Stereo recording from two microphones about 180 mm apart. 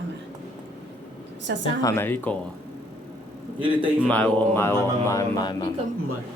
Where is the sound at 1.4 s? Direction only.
90° right.